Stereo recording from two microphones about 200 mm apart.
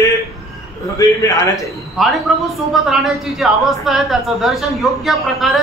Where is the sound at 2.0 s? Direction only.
Centre (ahead or behind).